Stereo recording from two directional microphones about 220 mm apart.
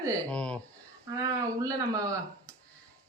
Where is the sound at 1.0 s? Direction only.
15° right (ahead or behind).